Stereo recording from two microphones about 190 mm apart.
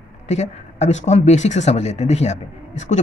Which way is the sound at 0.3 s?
35° left (ahead or behind).